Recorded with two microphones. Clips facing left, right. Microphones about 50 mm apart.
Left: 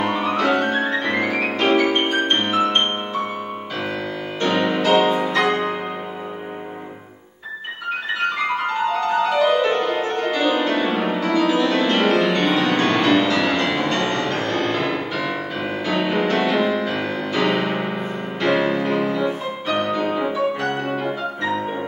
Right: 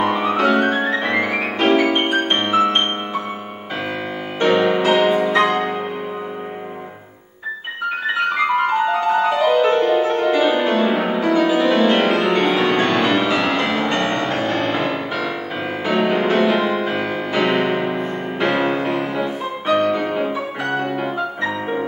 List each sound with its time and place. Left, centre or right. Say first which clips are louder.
0.0 s music: right 3 dB; centre
1.9 s music: right 1 dB; centre
4.4 s music: right 4 dB; centre
5.2 s music: right 3 dB; right
8.5 s music: right 4 dB; centre
16.3 s music: right 2 dB; centre
18.9 s music: left 1 dB; centre